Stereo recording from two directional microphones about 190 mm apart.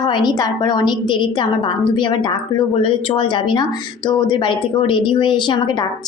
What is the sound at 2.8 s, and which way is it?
A woman's voice, 30° left (ahead or behind).